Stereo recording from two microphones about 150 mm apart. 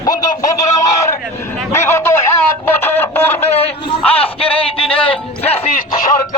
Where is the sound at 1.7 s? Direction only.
15° left (ahead or behind).